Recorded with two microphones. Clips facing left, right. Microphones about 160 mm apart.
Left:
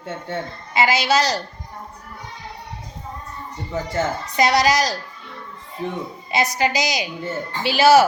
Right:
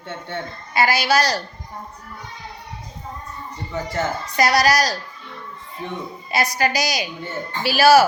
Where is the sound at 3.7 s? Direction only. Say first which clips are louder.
Left 1 dB; 25° left (ahead or behind).